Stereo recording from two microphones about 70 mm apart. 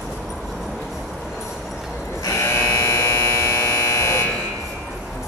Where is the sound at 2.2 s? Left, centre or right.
Left.